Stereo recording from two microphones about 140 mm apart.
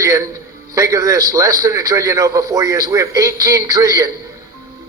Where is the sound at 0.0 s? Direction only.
20° right (ahead or behind).